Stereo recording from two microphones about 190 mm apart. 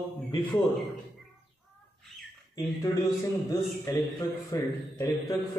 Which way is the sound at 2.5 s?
15° left (ahead or behind).